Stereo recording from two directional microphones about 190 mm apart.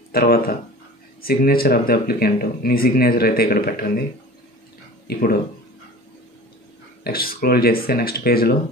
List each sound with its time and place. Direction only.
0.1 s speech: 55° left (ahead or behind)
5.0 s speech: 55° left (ahead or behind)
7.0 s speech: 50° left (ahead or behind)